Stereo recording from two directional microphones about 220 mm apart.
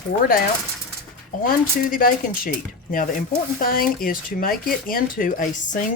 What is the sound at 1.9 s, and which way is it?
Speech, 40° left (ahead or behind).